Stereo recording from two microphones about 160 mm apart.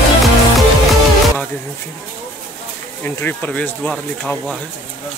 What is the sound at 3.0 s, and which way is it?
Speech, 10° left (ahead or behind).